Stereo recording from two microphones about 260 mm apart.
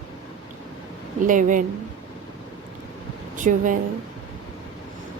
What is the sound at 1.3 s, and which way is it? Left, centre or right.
Speech, right.